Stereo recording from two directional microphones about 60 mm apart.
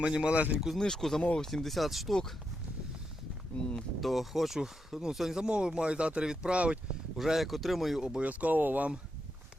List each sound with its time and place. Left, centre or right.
0.0 s speech: centre
0.8 s speech: centre
1.2 s speech: centre
1.5 s speech: centre
3.5 s speech: centre
4.0 s speech: centre
7.2 s speech: centre
8.2 s speech: right